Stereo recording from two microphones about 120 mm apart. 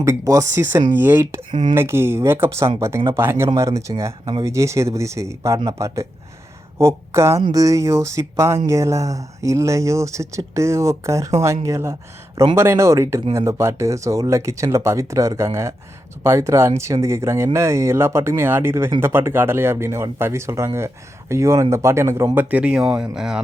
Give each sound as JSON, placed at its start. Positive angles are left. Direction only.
{"t": 0.0, "sound": "speech", "side_deg": -25}
{"t": 1.5, "sound": "speech", "side_deg": -40}
{"t": 1.7, "sound": "speech", "side_deg": -20}
{"t": 22.4, "sound": "speech", "side_deg": -10}